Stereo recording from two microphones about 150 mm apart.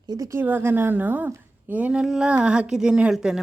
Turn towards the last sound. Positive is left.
turn(degrees=-5)  # may be behind; listen again after turning